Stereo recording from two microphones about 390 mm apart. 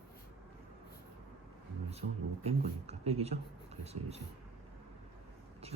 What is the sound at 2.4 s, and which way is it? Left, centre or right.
Speech, centre.